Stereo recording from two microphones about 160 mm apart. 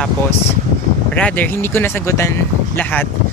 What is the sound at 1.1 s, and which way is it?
Speech, 10° left (ahead or behind).